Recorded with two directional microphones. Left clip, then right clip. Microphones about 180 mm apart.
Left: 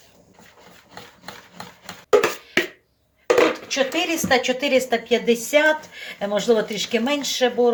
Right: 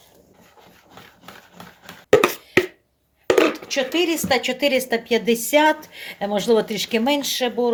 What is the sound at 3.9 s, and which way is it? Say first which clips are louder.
A woman's voice: right 1 dB; 55° right (ahead or behind).